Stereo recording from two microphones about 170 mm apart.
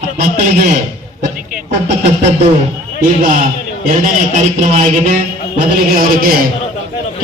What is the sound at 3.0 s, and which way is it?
A man's voice, 50° right (ahead or behind).